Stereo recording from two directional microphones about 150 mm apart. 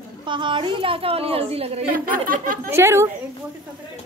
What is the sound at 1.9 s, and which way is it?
Speech, 70° right (ahead or behind).